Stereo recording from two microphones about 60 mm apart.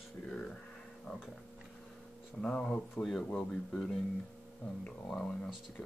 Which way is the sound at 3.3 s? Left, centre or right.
Left.